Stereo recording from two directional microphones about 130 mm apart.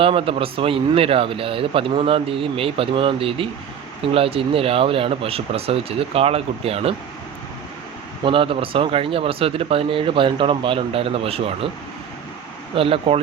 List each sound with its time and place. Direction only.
0.0 s speech: 45° right (ahead or behind)
8.2 s speech: 45° right (ahead or behind)
12.7 s speech: 45° right (ahead or behind)